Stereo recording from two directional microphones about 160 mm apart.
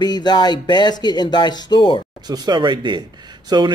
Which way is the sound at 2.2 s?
25° right (ahead or behind).